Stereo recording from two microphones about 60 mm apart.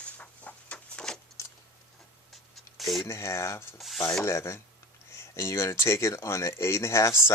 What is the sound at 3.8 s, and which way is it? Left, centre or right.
Rub, centre.